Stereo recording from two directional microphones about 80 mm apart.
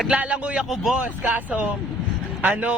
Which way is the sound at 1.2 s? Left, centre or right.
Right.